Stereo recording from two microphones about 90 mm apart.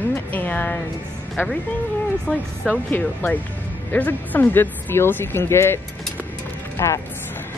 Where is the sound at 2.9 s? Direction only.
20° left (ahead or behind).